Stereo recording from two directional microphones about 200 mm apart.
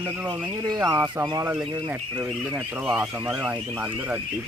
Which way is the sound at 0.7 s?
15° right (ahead or behind).